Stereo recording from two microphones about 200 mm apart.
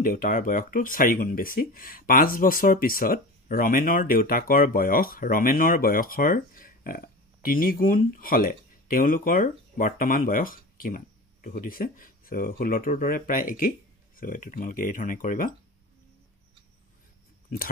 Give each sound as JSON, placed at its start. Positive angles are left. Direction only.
{"t": 0.0, "sound": "speech", "side_deg": 45}